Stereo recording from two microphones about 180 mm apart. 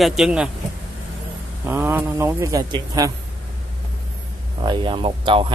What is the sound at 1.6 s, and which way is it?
Speech, 10° right (ahead or behind).